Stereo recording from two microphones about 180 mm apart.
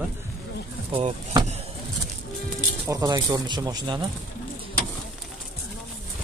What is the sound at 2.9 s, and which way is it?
Speech, 20° right (ahead or behind).